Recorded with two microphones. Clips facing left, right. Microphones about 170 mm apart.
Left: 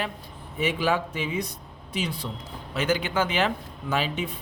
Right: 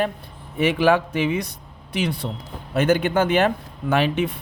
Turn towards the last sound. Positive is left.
turn(degrees=-65)  # may be behind; listen again after turning